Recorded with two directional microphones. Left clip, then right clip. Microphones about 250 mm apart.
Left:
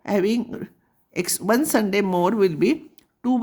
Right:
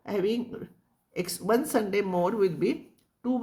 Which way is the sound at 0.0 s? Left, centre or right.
Left.